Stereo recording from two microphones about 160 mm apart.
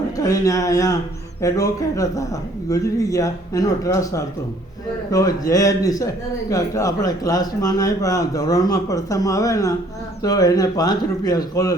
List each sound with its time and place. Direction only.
0.2 s a man's voice: 20° left (ahead or behind)